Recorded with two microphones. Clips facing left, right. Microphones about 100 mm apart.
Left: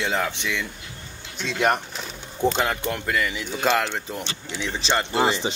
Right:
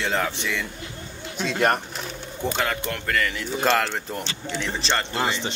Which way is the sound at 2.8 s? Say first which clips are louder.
Left 1 dB; 15° left (ahead or behind).